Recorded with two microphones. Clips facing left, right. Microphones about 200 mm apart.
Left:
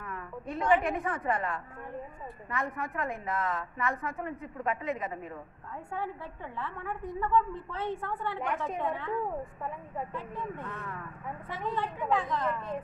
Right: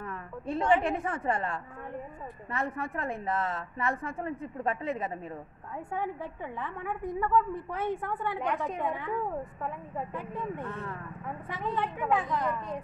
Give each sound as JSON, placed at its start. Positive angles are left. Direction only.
{"t": 0.0, "sound": "a woman's voice", "side_deg": -30}
{"t": 5.9, "sound": "a woman's voice", "side_deg": -15}
{"t": 11.8, "sound": "a woman's voice", "side_deg": -20}